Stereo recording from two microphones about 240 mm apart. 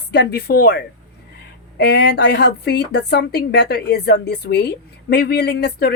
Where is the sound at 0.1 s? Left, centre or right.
Left.